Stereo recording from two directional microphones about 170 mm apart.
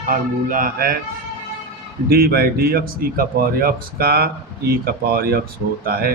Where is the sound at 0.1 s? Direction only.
55° right (ahead or behind).